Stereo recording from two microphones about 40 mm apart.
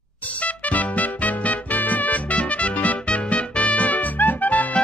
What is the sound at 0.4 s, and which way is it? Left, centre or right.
Music, left.